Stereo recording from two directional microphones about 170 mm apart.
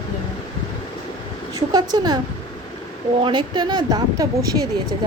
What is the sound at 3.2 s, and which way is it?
Speech, 25° right (ahead or behind).